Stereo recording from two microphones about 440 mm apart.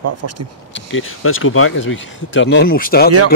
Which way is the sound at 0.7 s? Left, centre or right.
Left.